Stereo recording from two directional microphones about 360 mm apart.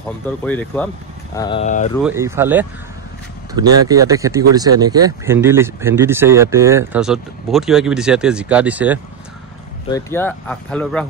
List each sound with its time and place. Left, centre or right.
0.5 s speech: centre
2.0 s speech: centre
3.8 s speech: centre
9.8 s speech: centre